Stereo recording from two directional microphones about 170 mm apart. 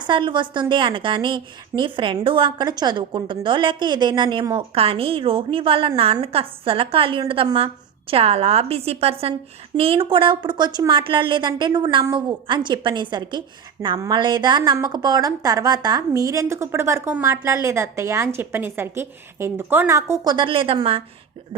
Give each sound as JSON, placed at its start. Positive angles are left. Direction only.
{"t": 0.0, "sound": "a woman's voice", "side_deg": -30}
{"t": 20.3, "sound": "a woman's voice", "side_deg": -30}